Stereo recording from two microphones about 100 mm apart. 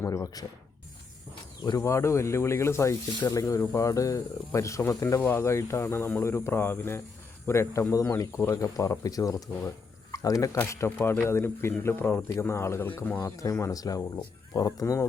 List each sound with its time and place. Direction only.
0.0 s speech: 30° left (ahead or behind)
1.8 s speech: 30° left (ahead or behind)